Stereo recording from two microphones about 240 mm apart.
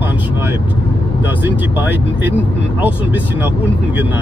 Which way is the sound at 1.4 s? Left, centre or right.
Centre.